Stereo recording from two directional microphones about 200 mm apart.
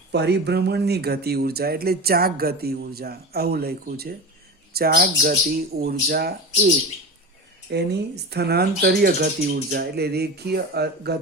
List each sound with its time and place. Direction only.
0.1 s speech: 55° right (ahead or behind)
7.7 s speech: 55° right (ahead or behind)